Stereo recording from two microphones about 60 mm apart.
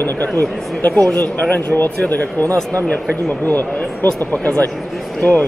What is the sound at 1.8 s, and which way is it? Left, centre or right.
Speech, left.